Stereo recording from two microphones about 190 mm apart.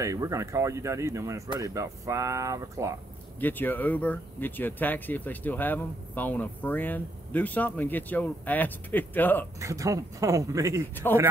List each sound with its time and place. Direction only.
0.0 s speech: 15° right (ahead or behind)
3.3 s speech: 10° left (ahead or behind)
9.6 s speech: 15° right (ahead or behind)